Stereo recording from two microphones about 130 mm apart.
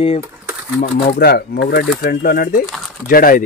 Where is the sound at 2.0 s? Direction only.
90° left.